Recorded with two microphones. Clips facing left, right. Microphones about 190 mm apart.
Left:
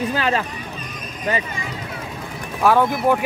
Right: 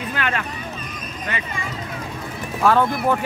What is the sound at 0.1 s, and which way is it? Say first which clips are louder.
Speech: left 4 dB; 30° left (ahead or behind).